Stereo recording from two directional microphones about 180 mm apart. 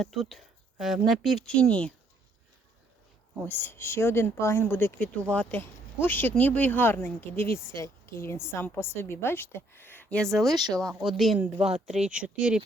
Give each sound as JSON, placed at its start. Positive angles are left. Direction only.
{"t": 0.0, "sound": "speech", "side_deg": 0}
{"t": 3.4, "sound": "a woman's voice", "side_deg": 15}
{"t": 10.5, "sound": "speech", "side_deg": -20}
{"t": 11.0, "sound": "speech", "side_deg": 0}